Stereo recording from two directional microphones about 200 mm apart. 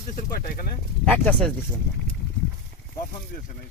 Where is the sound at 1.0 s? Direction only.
5° left (ahead or behind).